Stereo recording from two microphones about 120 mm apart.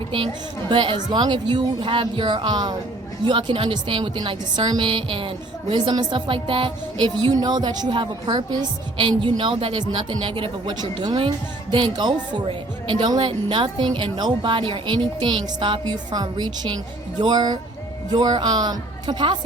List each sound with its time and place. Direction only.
0.7 s a woman's voice: 45° right (ahead or behind)